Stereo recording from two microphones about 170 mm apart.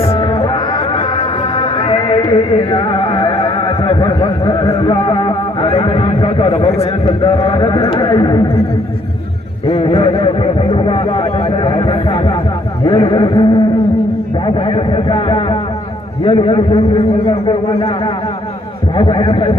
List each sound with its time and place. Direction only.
0.0 s music: 35° left (ahead or behind)
9.7 s a sound: 30° left (ahead or behind)
16.3 s a man's voice: 30° left (ahead or behind)